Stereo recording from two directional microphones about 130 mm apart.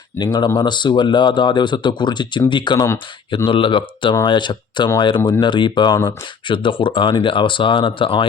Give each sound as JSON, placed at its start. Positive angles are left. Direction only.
{"t": 0.2, "sound": "speech", "side_deg": 35}